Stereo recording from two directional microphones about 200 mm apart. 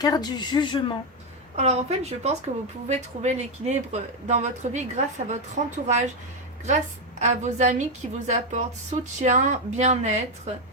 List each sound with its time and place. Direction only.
0.0 s speech: 20° left (ahead or behind)
1.5 s speech: 35° right (ahead or behind)